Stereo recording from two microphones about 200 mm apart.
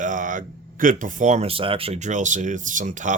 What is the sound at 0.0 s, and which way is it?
Speech, 40° right (ahead or behind).